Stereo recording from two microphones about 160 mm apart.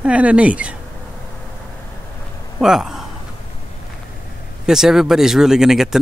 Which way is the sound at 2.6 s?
5° right (ahead or behind).